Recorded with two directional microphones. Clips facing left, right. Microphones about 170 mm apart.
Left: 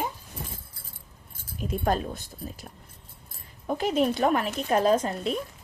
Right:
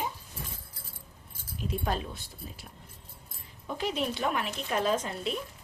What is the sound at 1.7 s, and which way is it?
Speech, 45° left (ahead or behind).